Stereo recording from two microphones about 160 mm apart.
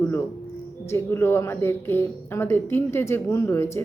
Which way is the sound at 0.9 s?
15° left (ahead or behind).